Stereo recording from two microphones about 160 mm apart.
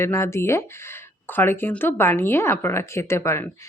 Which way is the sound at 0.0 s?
15° left (ahead or behind).